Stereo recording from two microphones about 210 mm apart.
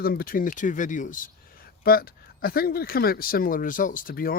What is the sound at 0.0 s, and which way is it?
Speech, 45° left (ahead or behind).